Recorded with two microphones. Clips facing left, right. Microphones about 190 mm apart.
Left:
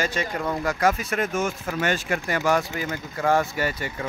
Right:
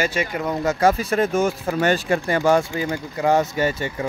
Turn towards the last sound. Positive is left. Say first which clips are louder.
# right 5 dB
turn(degrees=-25)  # may be behind; listen again after turning